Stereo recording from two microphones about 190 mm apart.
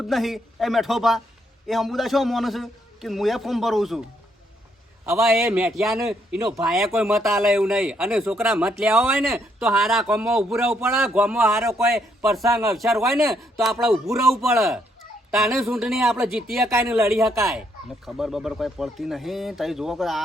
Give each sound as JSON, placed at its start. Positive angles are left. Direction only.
{"t": 0.0, "sound": "speech", "side_deg": 0}
{"t": 5.1, "sound": "speech", "side_deg": 0}
{"t": 11.4, "sound": "speech", "side_deg": -15}
{"t": 12.7, "sound": "speech", "side_deg": 0}
{"t": 16.7, "sound": "speech", "side_deg": -15}
{"t": 18.0, "sound": "speech", "side_deg": 0}